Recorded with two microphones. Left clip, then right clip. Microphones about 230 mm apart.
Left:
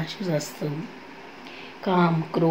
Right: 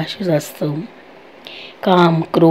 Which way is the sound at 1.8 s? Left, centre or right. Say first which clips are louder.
Right 10 dB; right.